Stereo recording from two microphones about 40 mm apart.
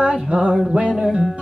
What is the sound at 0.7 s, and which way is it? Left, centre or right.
Music, right.